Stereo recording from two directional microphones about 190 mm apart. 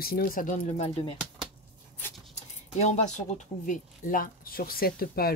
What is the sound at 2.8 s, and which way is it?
Speech, 35° left (ahead or behind).